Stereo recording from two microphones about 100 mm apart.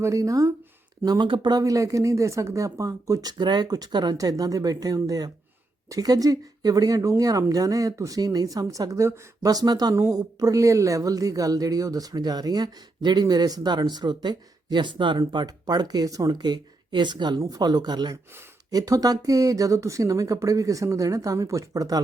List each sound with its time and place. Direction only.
0.0 s a woman's voice: 35° right (ahead or behind)